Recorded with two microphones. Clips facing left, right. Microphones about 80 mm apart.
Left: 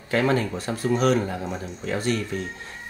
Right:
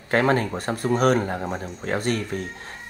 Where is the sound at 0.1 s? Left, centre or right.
Right.